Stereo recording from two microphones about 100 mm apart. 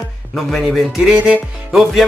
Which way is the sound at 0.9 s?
10° right (ahead or behind).